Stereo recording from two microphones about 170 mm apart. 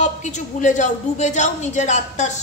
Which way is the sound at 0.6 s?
45° left (ahead or behind).